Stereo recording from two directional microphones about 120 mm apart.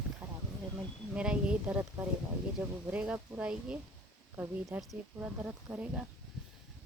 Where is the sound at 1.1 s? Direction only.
10° right (ahead or behind).